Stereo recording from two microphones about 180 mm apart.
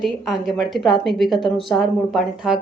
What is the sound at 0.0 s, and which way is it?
Speech, centre (ahead or behind).